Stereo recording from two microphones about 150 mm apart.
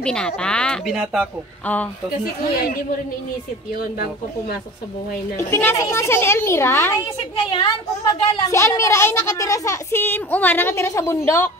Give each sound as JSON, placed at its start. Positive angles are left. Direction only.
{"t": 0.0, "sound": "speech", "side_deg": 5}
{"t": 5.5, "sound": "a woman's voice", "side_deg": 15}